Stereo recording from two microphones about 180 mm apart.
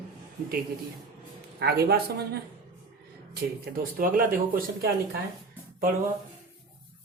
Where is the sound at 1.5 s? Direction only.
60° right (ahead or behind).